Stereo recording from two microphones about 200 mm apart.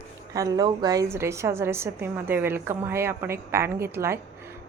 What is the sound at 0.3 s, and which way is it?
A woman's voice, 20° right (ahead or behind).